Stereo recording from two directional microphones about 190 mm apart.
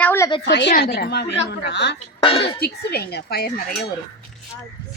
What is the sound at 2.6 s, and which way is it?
Speech, 55° left (ahead or behind).